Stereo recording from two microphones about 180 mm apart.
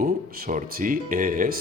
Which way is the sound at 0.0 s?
50° right (ahead or behind).